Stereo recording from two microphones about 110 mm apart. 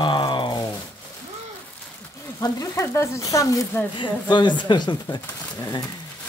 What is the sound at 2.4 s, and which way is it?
Speech, 30° left (ahead or behind).